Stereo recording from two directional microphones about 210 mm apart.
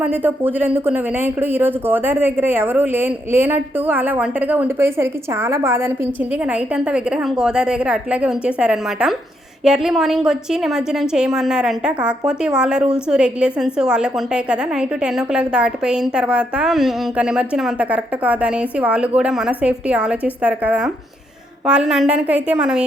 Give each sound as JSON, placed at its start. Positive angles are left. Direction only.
{"t": 0.0, "sound": "a woman's voice", "side_deg": -10}